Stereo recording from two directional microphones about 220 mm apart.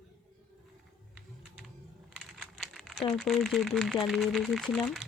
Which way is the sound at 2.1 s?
Centre (ahead or behind).